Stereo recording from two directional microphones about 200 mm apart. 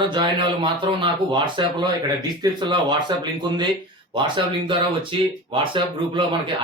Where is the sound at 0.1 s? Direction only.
25° right (ahead or behind).